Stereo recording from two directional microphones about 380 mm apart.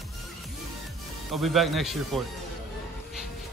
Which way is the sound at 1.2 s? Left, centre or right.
Centre.